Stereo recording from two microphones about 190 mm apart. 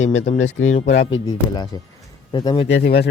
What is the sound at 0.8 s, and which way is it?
Speech, 65° left (ahead or behind).